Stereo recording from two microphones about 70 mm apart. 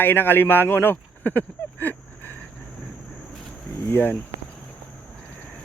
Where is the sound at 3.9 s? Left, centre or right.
Left.